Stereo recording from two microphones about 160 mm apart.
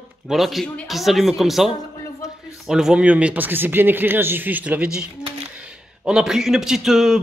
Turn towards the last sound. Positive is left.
turn(degrees=-5)  # may be behind; listen again after turning